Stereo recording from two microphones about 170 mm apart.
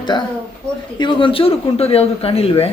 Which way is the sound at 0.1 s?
25° left (ahead or behind).